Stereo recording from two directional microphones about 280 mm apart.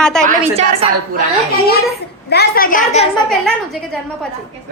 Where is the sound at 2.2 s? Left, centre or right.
Left.